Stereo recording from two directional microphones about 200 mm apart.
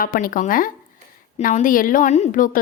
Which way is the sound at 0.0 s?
45° left (ahead or behind).